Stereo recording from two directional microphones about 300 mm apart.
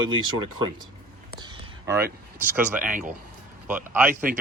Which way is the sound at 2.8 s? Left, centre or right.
Right.